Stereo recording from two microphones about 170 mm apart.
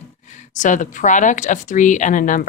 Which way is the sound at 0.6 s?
50° left (ahead or behind).